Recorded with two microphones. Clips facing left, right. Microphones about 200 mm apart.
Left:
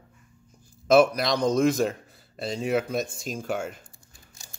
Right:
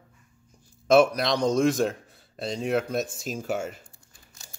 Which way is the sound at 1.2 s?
Centre (ahead or behind).